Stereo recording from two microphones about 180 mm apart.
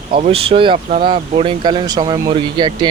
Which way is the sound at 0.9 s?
50° right (ahead or behind).